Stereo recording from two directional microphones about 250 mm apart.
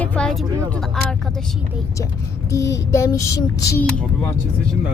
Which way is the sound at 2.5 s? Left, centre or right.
Centre.